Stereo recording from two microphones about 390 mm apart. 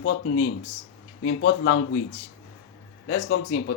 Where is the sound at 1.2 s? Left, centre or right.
Left.